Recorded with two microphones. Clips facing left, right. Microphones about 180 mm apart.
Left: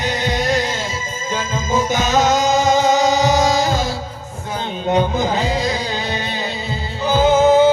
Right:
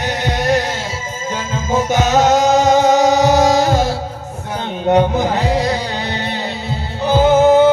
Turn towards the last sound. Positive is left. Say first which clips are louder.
# right 2 dB
turn(degrees=-65)  # may be behind; listen again after turning